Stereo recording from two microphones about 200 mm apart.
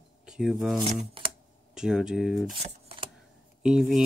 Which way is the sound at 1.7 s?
5° right (ahead or behind).